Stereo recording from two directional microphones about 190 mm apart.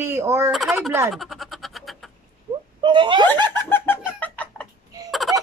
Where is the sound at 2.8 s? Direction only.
25° right (ahead or behind).